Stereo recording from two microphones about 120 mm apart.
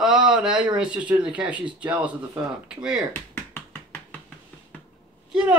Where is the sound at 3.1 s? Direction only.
20° left (ahead or behind).